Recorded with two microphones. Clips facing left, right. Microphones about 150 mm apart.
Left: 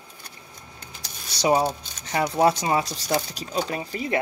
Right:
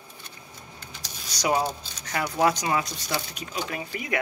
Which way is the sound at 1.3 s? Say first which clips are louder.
Left 4 dB; 30° left (ahead or behind).